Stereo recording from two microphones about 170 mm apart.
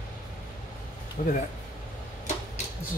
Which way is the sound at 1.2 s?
50° left (ahead or behind).